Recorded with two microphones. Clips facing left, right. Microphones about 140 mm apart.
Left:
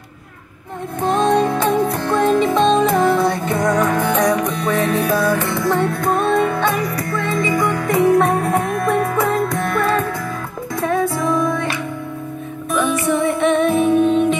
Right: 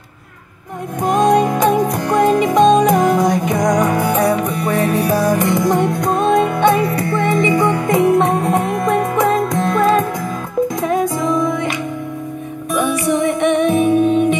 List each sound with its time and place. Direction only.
1.0 s music: 15° right (ahead or behind)
6.8 s music: 25° right (ahead or behind)
8.5 s music: 15° right (ahead or behind)
12.7 s music: 15° right (ahead or behind)